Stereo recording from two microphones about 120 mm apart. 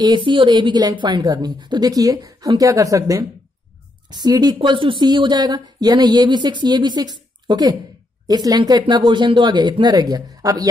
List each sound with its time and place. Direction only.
0.0 s a woman's voice: 40° right (ahead or behind)
4.6 s a woman's voice: 45° right (ahead or behind); by 10.7 s 30° right (ahead or behind)